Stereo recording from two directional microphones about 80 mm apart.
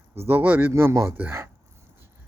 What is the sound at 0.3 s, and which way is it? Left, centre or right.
Speech, right.